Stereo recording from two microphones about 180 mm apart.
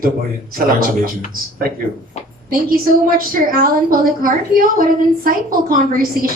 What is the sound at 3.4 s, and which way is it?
A woman's voice, 55° right (ahead or behind).